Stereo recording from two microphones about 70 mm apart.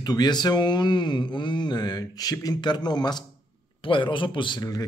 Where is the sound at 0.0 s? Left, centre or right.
Left.